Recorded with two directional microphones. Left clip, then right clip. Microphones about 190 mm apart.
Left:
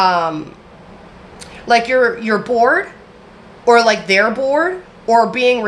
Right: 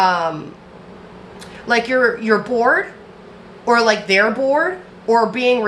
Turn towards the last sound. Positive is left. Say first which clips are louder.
# left 2 dB
turn(degrees=25)  # may be behind; listen again after turning